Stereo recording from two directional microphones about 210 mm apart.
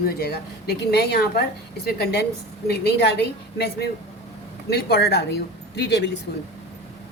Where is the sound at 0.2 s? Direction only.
50° left (ahead or behind).